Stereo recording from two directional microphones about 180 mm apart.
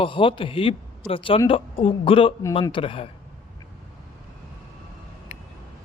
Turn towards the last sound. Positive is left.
turn(degrees=40)  # may be behind; listen again after turning